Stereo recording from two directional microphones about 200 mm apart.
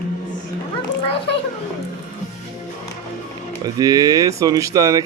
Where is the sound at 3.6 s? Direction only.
20° right (ahead or behind).